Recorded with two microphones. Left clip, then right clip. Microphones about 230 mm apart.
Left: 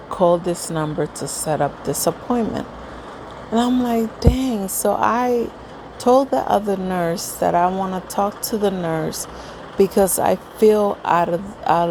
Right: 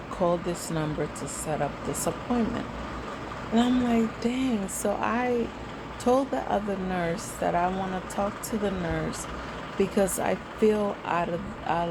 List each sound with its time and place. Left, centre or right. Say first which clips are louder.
0.1 s speech: left 10 dB; left
3.5 s speech: left 6 dB; left